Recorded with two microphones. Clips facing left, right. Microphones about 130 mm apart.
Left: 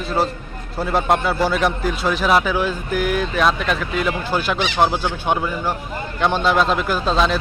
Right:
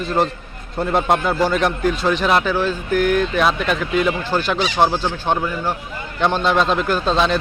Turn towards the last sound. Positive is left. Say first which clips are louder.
# right 1 dB
turn(degrees=0)  # may be behind; listen again after turning